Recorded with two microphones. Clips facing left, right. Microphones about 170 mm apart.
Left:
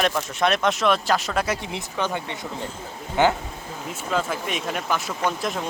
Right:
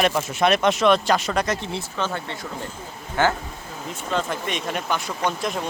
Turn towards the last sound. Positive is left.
turn(degrees=0)  # may be behind; listen again after turning